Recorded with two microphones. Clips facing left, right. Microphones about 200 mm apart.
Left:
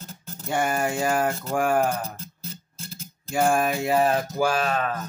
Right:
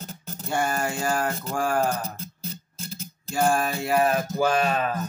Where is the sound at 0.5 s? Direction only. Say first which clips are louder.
Left 2 dB; 15° left (ahead or behind).